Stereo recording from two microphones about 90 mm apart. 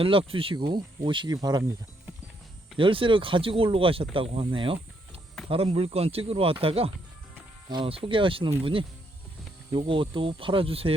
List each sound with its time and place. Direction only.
0.0 s speech: 90° right
0.5 s speech: 55° right (ahead or behind)
2.7 s speech: 75° right (ahead or behind); by 6.9 s 90° right
7.7 s speech: 75° right (ahead or behind)
9.7 s speech: 75° right (ahead or behind); by 10.9 s 90° right